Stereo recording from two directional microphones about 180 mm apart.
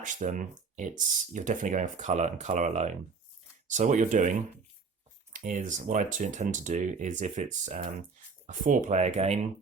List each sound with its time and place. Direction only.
0.0 s speech: 45° right (ahead or behind)